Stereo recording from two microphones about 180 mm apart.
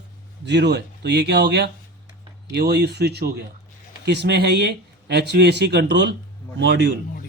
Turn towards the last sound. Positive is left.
turn(degrees=-75)  # may be behind; listen again after turning